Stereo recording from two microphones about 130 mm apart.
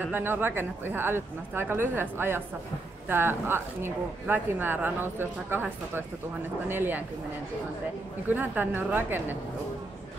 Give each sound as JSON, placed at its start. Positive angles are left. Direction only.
{"t": 0.1, "sound": "speech", "side_deg": -15}
{"t": 8.3, "sound": "speech", "side_deg": -15}